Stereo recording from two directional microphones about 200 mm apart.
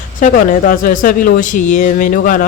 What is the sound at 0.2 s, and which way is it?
A man's voice, 40° left (ahead or behind).